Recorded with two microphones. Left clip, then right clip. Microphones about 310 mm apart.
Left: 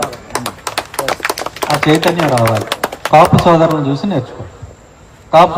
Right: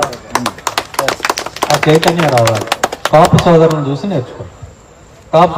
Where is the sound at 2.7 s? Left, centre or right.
Centre.